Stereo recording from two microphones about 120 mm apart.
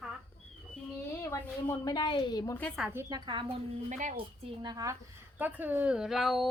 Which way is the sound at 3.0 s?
30° right (ahead or behind).